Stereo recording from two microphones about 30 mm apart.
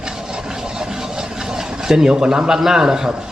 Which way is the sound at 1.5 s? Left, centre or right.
Centre.